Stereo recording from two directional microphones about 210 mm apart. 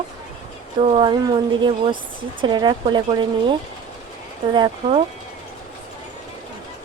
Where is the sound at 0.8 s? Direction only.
25° right (ahead or behind).